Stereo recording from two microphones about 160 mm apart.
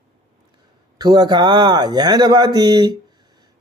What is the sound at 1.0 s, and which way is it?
Speech, 25° right (ahead or behind).